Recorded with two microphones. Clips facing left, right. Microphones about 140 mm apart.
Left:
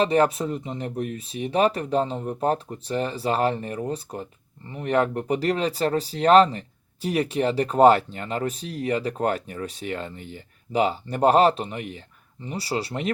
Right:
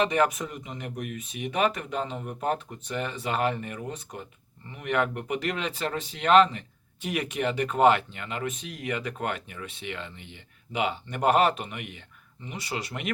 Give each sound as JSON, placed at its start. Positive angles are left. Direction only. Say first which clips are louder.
{"t": 0.0, "sound": "speech", "louder": "left 4 dB", "side_deg": 30}